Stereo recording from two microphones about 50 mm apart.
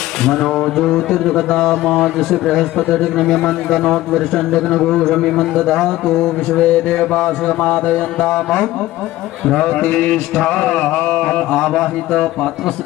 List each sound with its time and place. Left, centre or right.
0.3 s a man's voice: centre
2.1 s a man's voice: centre
7.1 s music: centre
8.3 s a man's voice: centre